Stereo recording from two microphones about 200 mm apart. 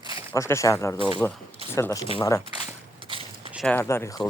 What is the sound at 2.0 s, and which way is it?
Speech, 25° left (ahead or behind).